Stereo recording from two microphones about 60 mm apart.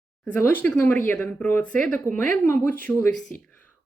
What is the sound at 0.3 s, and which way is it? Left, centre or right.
Speech, left.